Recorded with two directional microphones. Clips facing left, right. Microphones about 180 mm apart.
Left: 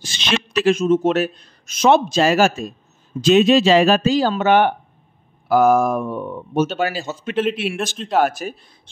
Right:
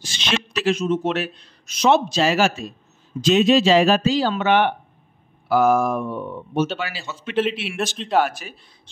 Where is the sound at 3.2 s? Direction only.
55° left (ahead or behind).